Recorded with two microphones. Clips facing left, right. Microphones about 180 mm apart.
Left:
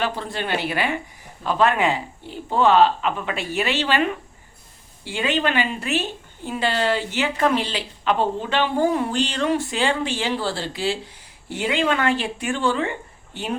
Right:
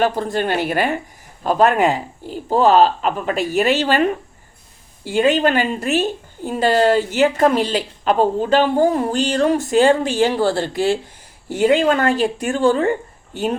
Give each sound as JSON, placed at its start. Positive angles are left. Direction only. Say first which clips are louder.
{"t": 0.0, "sound": "a woman's voice", "louder": "right 7 dB", "side_deg": -45}